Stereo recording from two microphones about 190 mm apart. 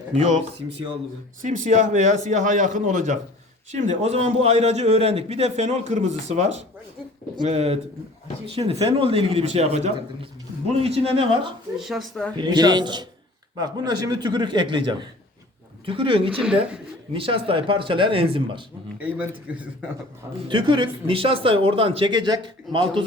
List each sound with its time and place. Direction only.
0.1 s a man's voice: 40° right (ahead or behind)
11.8 s speech: centre (ahead or behind)
12.4 s speech: 20° right (ahead or behind)
16.4 s speech: 5° right (ahead or behind)
17.1 s speech: 30° right (ahead or behind)
18.9 s speech: 5° right (ahead or behind)
20.5 s speech: 25° right (ahead or behind)